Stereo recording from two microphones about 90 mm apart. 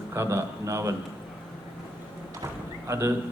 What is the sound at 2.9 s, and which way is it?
Speech, 30° right (ahead or behind).